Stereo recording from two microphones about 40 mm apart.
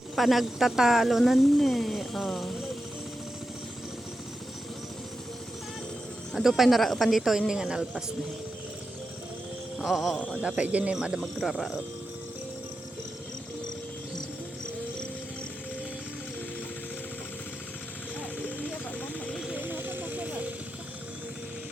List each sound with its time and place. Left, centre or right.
0.2 s a woman's voice: centre
6.3 s speech: centre
7.3 s a woman's voice: centre
9.7 s music: centre
10.2 s a man's voice: left
10.6 s speech: right
11.3 s speech: centre
18.2 s a sound: left
19.6 s vehicle: right